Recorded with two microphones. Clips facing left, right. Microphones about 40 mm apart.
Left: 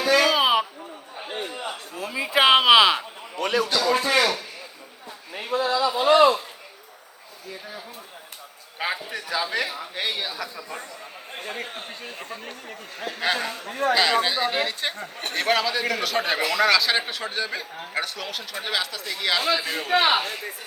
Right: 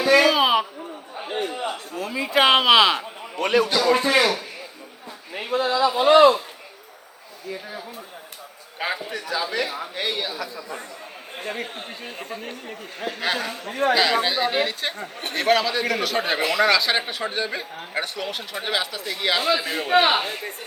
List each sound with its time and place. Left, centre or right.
0.0 s a sound: centre
1.5 s a man's voice: centre
1.9 s speech: centre
3.3 s a man's voice: right
3.7 s speech: centre
4.2 s a man's voice: centre
5.3 s speech: centre
8.8 s a man's voice: centre